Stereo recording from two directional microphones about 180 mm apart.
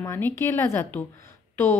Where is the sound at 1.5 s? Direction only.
10° left (ahead or behind).